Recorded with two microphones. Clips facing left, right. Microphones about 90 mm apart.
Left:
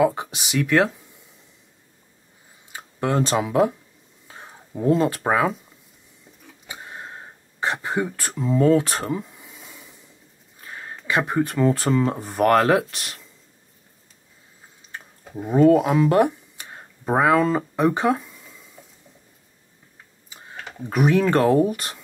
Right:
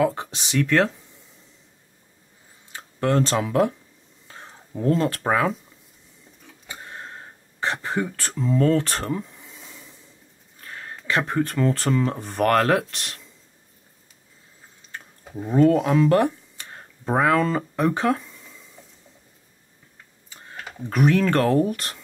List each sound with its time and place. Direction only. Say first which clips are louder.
0.0 s speech: left 2 dB; 10° left (ahead or behind)
2.7 s speech: right 1 dB; 10° left (ahead or behind)
6.4 s a sound: left 1 dB; 10° left (ahead or behind)
10.6 s speech: left 1 dB; 10° left (ahead or behind)
14.9 s a sound: left 1 dB; 5° left (ahead or behind)
20.2 s computer keyboard: left 1 dB; 10° left (ahead or behind)
20.8 s speech: left 1 dB; 10° left (ahead or behind)